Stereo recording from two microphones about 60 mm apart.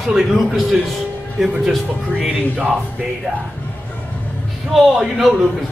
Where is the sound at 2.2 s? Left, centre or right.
Right.